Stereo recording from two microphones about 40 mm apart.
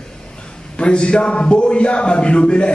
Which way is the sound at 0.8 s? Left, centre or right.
Left.